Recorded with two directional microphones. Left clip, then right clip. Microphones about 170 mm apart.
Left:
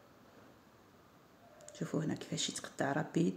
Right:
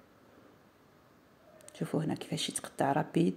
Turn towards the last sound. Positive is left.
turn(degrees=-15)  # may be behind; listen again after turning